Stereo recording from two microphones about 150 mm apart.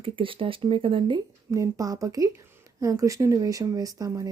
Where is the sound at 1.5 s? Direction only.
20° right (ahead or behind).